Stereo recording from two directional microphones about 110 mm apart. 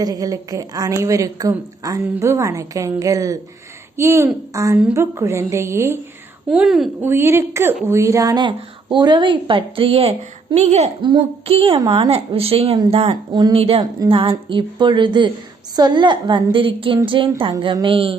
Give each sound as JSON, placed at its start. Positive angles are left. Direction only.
{"t": 0.0, "sound": "a woman's voice", "side_deg": -35}
{"t": 6.5, "sound": "a woman's voice", "side_deg": -5}
{"t": 7.0, "sound": "a woman's voice", "side_deg": -20}
{"t": 8.4, "sound": "speech", "side_deg": -45}
{"t": 11.0, "sound": "speech", "side_deg": -50}
{"t": 14.1, "sound": "speech", "side_deg": -50}